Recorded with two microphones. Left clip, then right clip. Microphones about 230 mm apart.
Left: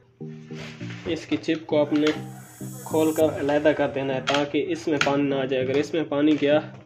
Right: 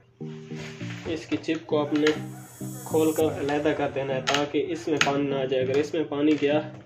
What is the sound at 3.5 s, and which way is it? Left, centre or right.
Speech, left.